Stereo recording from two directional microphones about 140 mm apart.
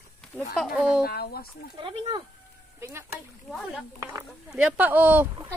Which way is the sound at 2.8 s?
20° right (ahead or behind).